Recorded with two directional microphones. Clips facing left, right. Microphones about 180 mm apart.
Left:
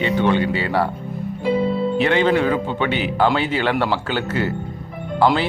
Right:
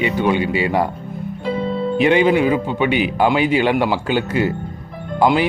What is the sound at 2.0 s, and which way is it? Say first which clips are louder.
Speech: right 4 dB; 15° right (ahead or behind).